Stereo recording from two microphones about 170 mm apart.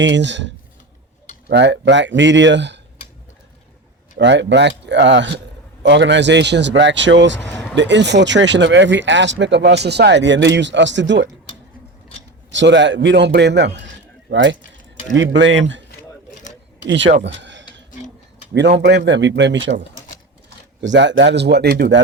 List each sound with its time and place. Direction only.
0.0 s speech: 90° right
4.2 s speech: 90° right
12.5 s speech: 90° right
14.6 s a sound: 50° left (ahead or behind)
15.1 s speech: 90° right
16.8 s speech: 90° right
18.9 s speech: 90° right
20.8 s speech: 90° right